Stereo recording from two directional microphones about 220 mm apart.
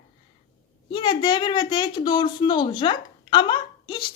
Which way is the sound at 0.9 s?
20° left (ahead or behind).